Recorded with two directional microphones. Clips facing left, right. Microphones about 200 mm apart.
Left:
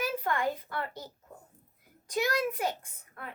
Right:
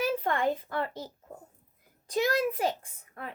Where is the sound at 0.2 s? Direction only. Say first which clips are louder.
Right 3 dB; 30° right (ahead or behind).